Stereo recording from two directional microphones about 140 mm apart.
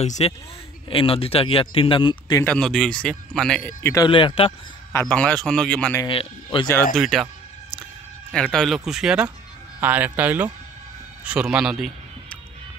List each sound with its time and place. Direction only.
0.0 s speech: 55° left (ahead or behind)
0.8 s a man's voice: 40° left (ahead or behind)
2.4 s speech: 5° left (ahead or behind)
3.8 s speech: 25° left (ahead or behind)
5.0 s speech: 10° left (ahead or behind)
6.0 s a man's voice: 40° left (ahead or behind)
7.0 s speech: centre (ahead or behind)
8.3 s speech: 5° left (ahead or behind)